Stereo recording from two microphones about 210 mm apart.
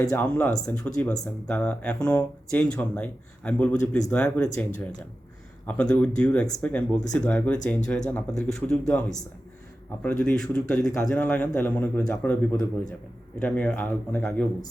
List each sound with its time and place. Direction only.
0.0 s speech: 5° left (ahead or behind)
5.6 s a man's voice: 5° left (ahead or behind)